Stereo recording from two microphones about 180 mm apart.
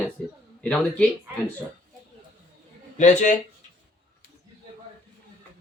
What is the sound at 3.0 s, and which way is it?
Speech, 45° left (ahead or behind).